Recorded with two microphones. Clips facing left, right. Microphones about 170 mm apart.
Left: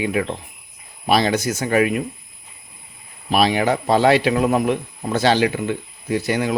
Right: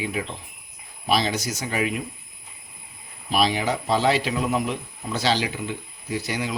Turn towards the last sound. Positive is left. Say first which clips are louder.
# left 7 dB
turn(degrees=55)  # may be behind; listen again after turning